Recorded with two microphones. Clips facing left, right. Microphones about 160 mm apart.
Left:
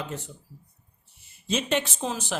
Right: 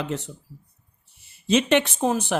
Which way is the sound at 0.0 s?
80° right.